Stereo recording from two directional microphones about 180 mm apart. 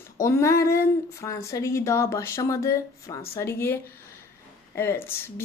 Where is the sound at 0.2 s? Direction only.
15° left (ahead or behind).